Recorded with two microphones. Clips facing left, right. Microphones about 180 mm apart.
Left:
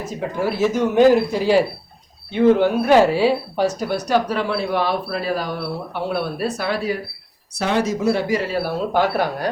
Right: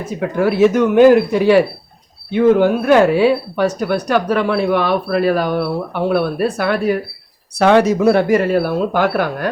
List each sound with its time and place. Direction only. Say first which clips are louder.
0.2 s speech: right 7 dB; 60° right (ahead or behind)
2.3 s speech: right 3 dB; 50° right (ahead or behind)
7.6 s speech: right 8 dB; 65° right (ahead or behind)